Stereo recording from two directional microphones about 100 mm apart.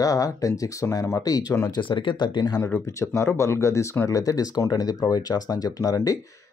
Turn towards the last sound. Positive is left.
turn(degrees=35)  # may be behind; listen again after turning